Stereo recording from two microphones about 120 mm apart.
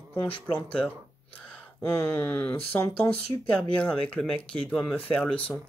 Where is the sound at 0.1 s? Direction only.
10° left (ahead or behind).